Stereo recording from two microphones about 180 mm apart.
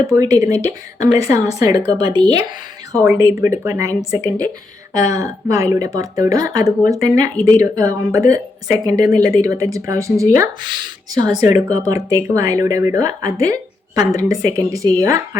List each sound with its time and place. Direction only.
0.1 s a woman's voice: 20° right (ahead or behind)